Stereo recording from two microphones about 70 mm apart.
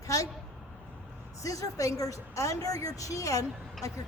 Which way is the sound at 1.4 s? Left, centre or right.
Left.